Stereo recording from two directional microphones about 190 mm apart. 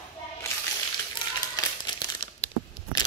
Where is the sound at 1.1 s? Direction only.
20° left (ahead or behind).